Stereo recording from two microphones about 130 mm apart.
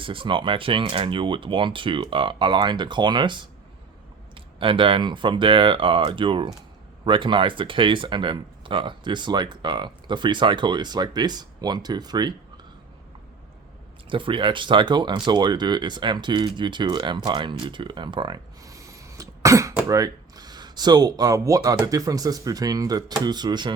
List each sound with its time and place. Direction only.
0.0 s speech: 40° right (ahead or behind)
14.1 s speech: 40° right (ahead or behind)
18.6 s cough: 25° right (ahead or behind)
19.9 s speech: 30° right (ahead or behind)